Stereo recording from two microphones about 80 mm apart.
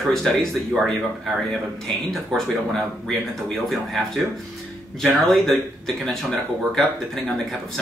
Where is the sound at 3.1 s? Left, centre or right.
Centre.